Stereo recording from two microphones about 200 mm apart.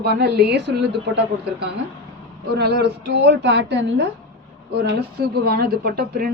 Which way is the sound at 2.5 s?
55° right (ahead or behind).